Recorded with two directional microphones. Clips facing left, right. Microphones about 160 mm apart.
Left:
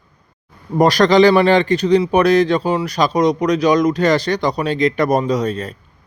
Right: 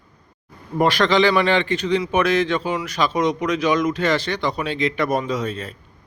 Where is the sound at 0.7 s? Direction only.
40° left (ahead or behind).